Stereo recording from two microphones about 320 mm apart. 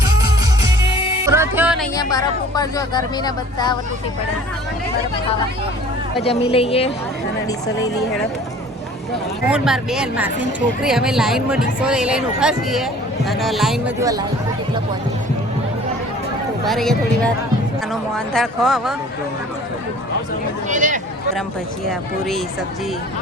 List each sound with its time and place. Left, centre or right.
1.2 s music: centre
2.0 s speech: centre
6.2 s speech: centre
9.5 s speech: centre
16.6 s speech: centre
18.3 s speech: centre
20.7 s speech: right